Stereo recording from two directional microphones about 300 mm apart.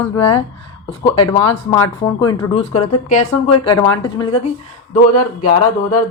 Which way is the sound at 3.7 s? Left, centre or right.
Centre.